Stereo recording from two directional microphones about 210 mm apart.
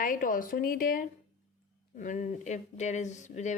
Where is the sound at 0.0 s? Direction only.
40° left (ahead or behind).